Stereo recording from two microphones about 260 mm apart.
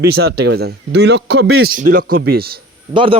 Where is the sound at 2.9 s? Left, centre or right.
Centre.